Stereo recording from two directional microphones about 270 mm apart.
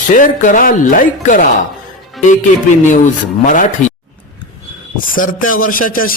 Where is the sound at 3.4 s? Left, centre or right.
Left.